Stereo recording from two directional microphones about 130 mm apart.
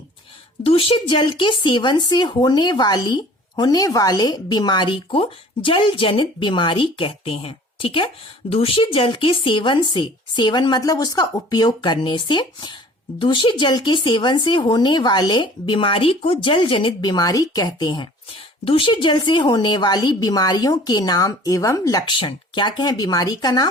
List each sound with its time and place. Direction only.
0.6 s speech: 45° left (ahead or behind)